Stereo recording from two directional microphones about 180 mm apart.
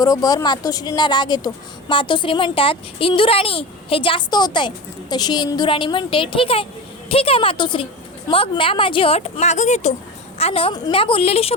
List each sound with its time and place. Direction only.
0.0 s a woman's voice: 20° left (ahead or behind)